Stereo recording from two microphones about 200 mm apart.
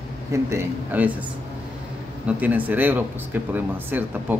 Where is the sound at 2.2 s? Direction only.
10° right (ahead or behind).